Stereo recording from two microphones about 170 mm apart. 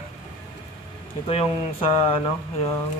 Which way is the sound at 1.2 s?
35° left (ahead or behind).